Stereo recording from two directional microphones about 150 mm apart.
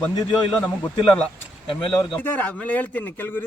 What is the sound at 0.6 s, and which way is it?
A man's voice, 10° left (ahead or behind).